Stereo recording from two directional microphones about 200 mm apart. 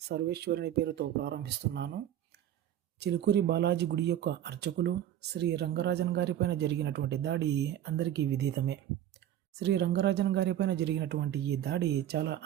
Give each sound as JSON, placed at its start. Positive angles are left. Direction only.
{"t": 0.1, "sound": "speech", "side_deg": -55}
{"t": 3.0, "sound": "speech", "side_deg": -60}